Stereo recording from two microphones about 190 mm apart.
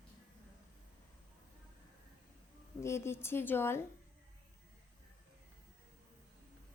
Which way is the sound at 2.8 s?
15° left (ahead or behind).